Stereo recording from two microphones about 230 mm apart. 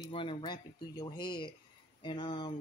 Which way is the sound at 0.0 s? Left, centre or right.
Left.